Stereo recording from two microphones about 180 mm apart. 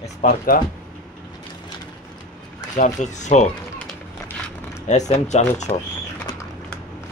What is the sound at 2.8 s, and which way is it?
Speech, 40° left (ahead or behind).